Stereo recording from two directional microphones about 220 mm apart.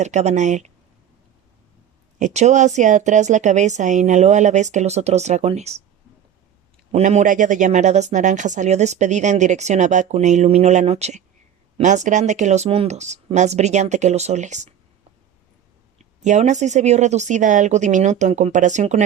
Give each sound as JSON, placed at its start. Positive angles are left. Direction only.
{"t": 0.0, "sound": "speech", "side_deg": -30}
{"t": 2.1, "sound": "speech", "side_deg": -30}
{"t": 6.9, "sound": "speech", "side_deg": -30}
{"t": 16.0, "sound": "speech", "side_deg": -30}